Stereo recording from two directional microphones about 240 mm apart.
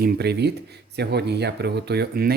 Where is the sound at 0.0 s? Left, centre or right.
Right.